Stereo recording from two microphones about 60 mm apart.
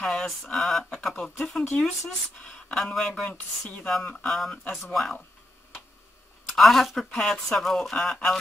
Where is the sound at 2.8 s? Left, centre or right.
Centre.